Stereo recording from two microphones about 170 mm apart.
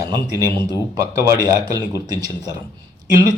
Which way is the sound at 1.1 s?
20° right (ahead or behind).